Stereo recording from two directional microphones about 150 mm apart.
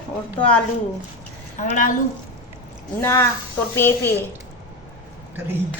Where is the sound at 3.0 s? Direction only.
15° left (ahead or behind).